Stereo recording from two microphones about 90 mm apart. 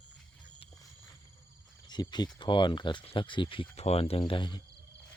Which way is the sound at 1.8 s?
50° left (ahead or behind).